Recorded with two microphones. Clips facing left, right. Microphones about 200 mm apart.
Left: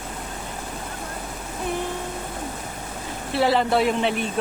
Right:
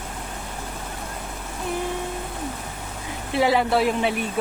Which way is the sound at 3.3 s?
10° right (ahead or behind).